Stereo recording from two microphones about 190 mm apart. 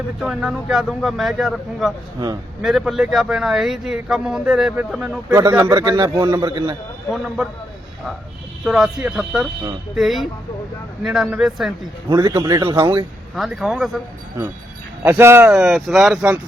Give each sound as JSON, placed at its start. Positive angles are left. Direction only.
{"t": 0.2, "sound": "a man's voice", "side_deg": -5}
{"t": 2.1, "sound": "a man's voice", "side_deg": -20}
{"t": 2.6, "sound": "a man's voice", "side_deg": 0}
{"t": 5.4, "sound": "a man's voice", "side_deg": -20}
{"t": 8.6, "sound": "a man's voice", "side_deg": 0}
{"t": 12.0, "sound": "a man's voice", "side_deg": -20}
{"t": 13.3, "sound": "a man's voice", "side_deg": 0}
{"t": 15.0, "sound": "a man's voice", "side_deg": -10}